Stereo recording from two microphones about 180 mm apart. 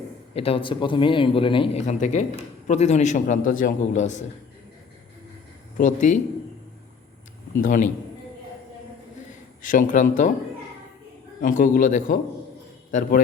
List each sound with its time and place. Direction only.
0.3 s a man's voice: 30° left (ahead or behind)
1.9 s a man's voice: 45° left (ahead or behind)
5.7 s speech: 45° left (ahead or behind)
7.6 s a man's voice: 45° left (ahead or behind)
9.6 s a man's voice: 45° left (ahead or behind)
11.3 s a man's voice: 50° left (ahead or behind)